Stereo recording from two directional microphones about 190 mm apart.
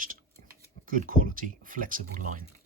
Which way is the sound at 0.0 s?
45° right (ahead or behind).